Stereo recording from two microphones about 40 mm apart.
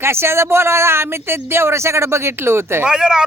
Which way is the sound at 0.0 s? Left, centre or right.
Right.